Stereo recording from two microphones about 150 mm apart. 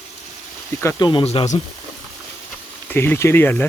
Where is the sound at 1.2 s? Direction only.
45° left (ahead or behind).